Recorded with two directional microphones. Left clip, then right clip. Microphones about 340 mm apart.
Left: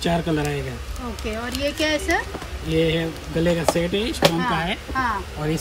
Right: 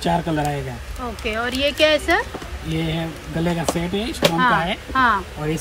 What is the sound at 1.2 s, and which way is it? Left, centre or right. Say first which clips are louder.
Speech: right 6 dB; centre.